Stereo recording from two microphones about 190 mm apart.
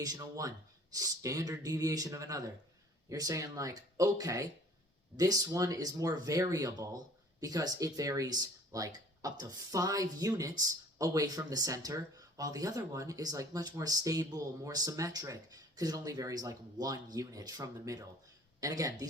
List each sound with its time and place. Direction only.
0.0 s speech: 20° right (ahead or behind)